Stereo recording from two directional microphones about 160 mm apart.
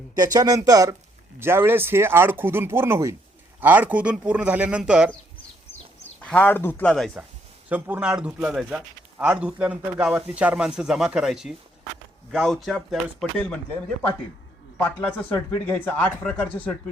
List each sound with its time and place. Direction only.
0.1 s speech: 25° right (ahead or behind); by 5.1 s 5° right (ahead or behind)
6.2 s speech: 10° left (ahead or behind)
7.7 s speech: 10° right (ahead or behind)
14.8 s speech: 10° left (ahead or behind)